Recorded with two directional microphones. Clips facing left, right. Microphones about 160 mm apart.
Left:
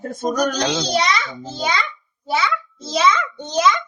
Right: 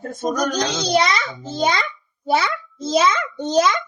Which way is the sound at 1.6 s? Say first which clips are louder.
Right 3 dB; 45° right (ahead or behind).